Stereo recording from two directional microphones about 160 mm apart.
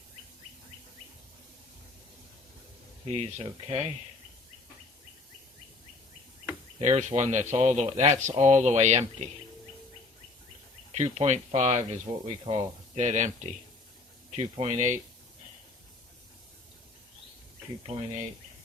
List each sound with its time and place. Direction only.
3.1 s speech: 40° right (ahead or behind)
6.7 s speech: 40° right (ahead or behind)
10.9 s speech: 45° right (ahead or behind)
14.5 s speech: 45° right (ahead or behind)
17.8 s speech: 45° right (ahead or behind)